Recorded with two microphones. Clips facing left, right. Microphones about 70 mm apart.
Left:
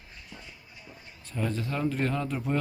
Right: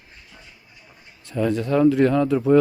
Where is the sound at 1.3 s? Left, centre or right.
Right.